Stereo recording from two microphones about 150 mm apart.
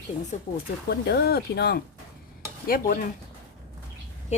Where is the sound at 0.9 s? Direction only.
90° left.